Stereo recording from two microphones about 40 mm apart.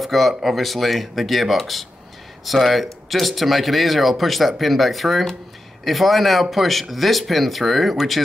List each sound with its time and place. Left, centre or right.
0.0 s speech: centre